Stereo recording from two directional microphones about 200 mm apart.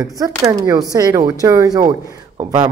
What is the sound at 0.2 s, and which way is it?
Speech, 15° right (ahead or behind).